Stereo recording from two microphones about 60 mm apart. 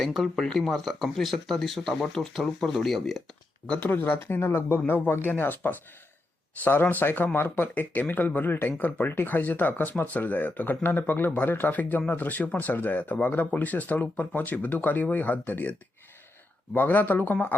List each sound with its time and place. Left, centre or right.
0.0 s speech: centre
3.8 s speech: left
16.7 s speech: left